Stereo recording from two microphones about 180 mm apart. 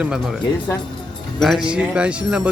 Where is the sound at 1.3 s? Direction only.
Centre (ahead or behind).